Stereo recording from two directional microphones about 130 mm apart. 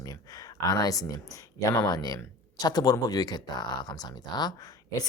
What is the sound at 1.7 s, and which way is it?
Speech, 25° left (ahead or behind).